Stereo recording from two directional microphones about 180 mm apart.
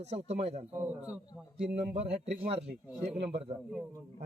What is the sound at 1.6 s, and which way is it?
Speech, 70° right (ahead or behind).